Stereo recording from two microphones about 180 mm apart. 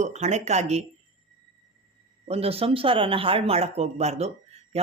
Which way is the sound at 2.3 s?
35° right (ahead or behind).